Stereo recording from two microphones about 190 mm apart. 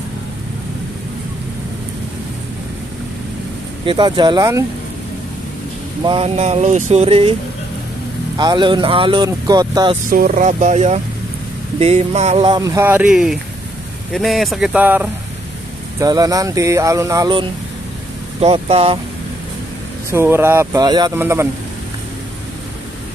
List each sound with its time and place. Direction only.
3.8 s speech: 25° right (ahead or behind)
6.0 s speech: 30° right (ahead or behind)
8.4 s speech: 25° right (ahead or behind)
10.0 s speech: 45° right (ahead or behind); by 15.0 s 10° right (ahead or behind)
16.0 s speech: 20° right (ahead or behind)
18.4 s speech: 35° right (ahead or behind)
20.1 s speech: 10° right (ahead or behind)